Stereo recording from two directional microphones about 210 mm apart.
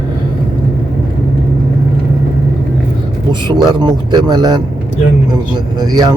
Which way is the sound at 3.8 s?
20° right (ahead or behind).